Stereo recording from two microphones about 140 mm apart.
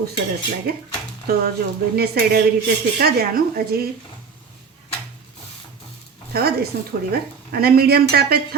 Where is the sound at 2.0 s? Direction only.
90° right.